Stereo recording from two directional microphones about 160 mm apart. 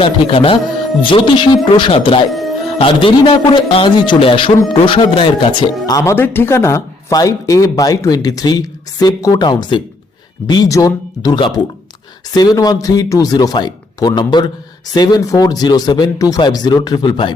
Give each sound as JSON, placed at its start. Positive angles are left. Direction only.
{"t": 0.0, "sound": "a man's voice", "side_deg": 35}